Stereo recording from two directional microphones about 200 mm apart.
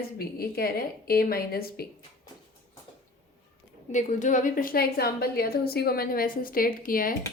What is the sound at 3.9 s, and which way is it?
A woman's voice, 40° left (ahead or behind).